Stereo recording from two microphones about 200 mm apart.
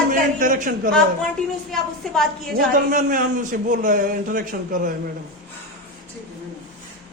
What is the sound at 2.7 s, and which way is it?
A man's voice, 40° right (ahead or behind).